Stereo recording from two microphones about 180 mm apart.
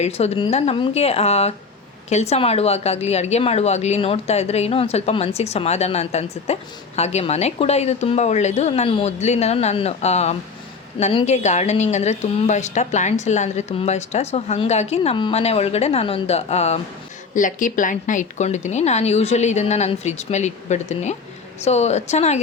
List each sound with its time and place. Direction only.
0.0 s a woman's voice: 35° left (ahead or behind)
17.3 s a woman's voice: 45° left (ahead or behind)